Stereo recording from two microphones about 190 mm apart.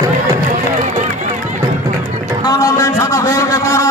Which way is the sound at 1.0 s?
40° right (ahead or behind).